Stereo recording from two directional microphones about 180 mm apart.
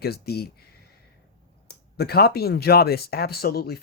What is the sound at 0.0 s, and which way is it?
Speech, 60° left (ahead or behind).